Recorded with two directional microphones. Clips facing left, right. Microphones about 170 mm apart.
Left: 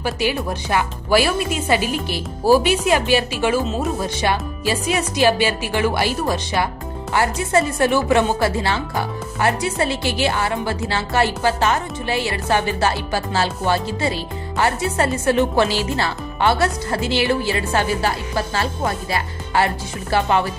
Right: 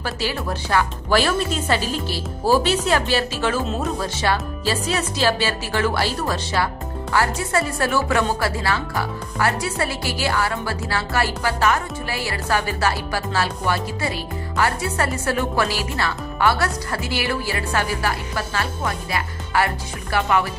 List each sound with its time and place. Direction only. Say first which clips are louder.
0.0 s speech: left 4 dB; 15° left (ahead or behind)